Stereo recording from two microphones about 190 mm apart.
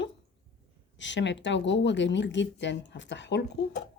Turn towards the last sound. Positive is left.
turn(degrees=65)  # may be behind; listen again after turning